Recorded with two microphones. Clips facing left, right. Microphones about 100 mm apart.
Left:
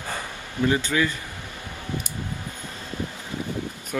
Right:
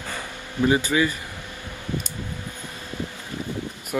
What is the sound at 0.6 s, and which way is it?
Speech, 15° right (ahead or behind).